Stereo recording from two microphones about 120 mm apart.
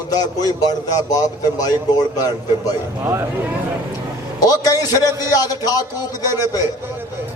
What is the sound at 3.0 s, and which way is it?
Speech, 20° right (ahead or behind).